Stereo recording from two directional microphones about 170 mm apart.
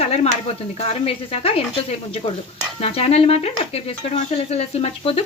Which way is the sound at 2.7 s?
35° left (ahead or behind).